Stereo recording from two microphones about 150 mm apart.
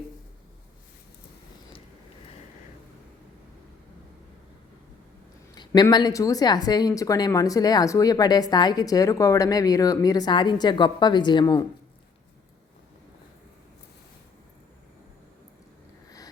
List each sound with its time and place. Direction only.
5.5 s speech: 25° left (ahead or behind)